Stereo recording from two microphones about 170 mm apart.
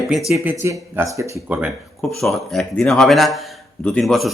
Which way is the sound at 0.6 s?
15° right (ahead or behind).